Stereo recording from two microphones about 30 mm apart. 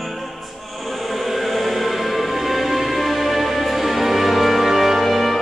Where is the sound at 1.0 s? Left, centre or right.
Centre.